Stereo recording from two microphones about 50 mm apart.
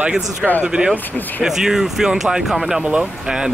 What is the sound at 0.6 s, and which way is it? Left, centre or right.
Speech, centre.